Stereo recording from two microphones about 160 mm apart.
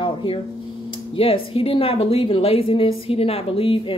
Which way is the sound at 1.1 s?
35° left (ahead or behind).